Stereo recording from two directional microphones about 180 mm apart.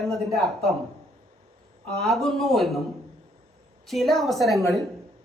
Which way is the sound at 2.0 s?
Centre (ahead or behind).